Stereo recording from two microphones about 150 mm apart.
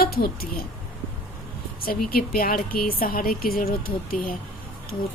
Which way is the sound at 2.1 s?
80° left.